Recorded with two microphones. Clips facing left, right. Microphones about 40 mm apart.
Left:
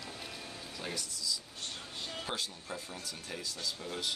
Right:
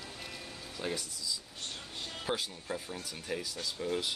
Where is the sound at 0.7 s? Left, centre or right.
Centre.